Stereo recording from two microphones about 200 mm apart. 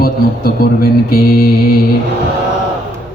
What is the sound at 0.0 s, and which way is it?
A man's voice, 50° left (ahead or behind).